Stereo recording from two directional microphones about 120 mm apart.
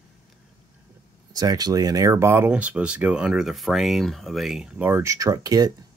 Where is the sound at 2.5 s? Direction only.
10° right (ahead or behind); by 5.7 s 30° right (ahead or behind).